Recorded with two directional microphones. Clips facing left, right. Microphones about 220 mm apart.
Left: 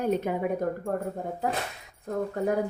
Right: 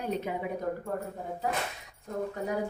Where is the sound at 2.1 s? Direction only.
55° left (ahead or behind).